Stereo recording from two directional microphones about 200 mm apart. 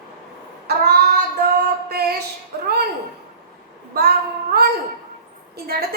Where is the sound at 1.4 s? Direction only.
50° right (ahead or behind).